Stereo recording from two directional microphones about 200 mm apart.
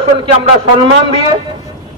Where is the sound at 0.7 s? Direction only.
25° right (ahead or behind).